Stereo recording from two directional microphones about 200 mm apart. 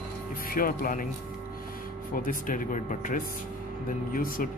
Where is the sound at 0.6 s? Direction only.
45° left (ahead or behind).